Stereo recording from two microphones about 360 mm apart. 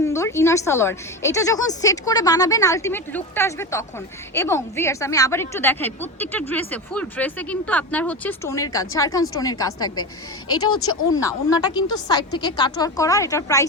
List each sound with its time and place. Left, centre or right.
0.0 s a woman's voice: centre
10.5 s speech: left
11.2 s a woman's voice: centre